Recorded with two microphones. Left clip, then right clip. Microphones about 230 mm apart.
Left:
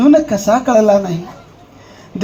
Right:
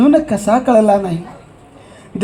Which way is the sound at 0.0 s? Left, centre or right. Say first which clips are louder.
Left 2 dB; right.